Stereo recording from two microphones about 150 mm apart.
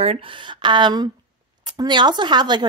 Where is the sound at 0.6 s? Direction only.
30° right (ahead or behind).